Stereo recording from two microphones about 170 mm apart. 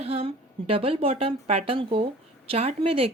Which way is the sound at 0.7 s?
35° right (ahead or behind).